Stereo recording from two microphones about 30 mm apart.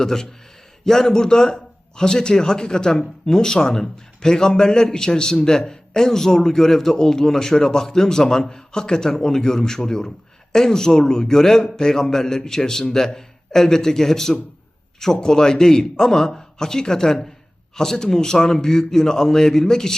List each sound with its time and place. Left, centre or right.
0.0 s a man's voice: centre